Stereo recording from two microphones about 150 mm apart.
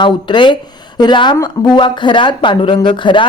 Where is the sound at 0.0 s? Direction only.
30° left (ahead or behind).